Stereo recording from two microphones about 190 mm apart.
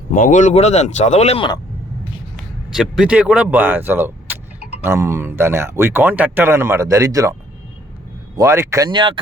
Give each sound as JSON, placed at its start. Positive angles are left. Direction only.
{"t": 0.1, "sound": "speech", "side_deg": 45}
{"t": 2.3, "sound": "speech", "side_deg": 0}
{"t": 8.4, "sound": "speech", "side_deg": -15}